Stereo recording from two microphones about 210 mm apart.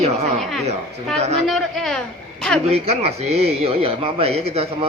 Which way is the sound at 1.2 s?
30° right (ahead or behind).